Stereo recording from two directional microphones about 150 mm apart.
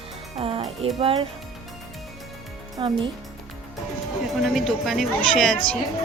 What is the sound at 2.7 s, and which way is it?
Speech, 35° right (ahead or behind).